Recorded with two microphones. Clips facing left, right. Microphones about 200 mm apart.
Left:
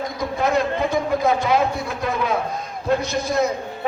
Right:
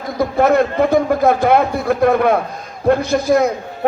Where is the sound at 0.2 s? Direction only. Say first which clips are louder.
Right 8 dB; 60° right (ahead or behind).